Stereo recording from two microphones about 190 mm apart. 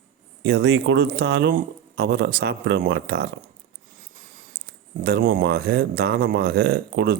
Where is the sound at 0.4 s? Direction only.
65° right (ahead or behind).